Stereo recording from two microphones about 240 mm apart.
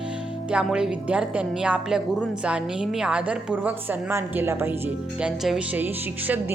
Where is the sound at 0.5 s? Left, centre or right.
Centre.